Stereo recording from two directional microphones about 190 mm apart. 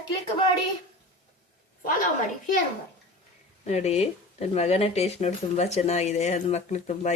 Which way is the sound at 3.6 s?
35° left (ahead or behind).